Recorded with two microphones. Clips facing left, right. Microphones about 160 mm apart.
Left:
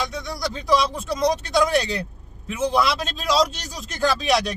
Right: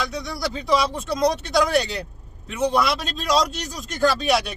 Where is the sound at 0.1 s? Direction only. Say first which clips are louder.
Right 1 dB; centre (ahead or behind).